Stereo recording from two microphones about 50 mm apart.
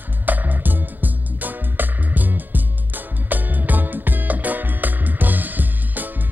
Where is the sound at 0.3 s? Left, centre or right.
Right.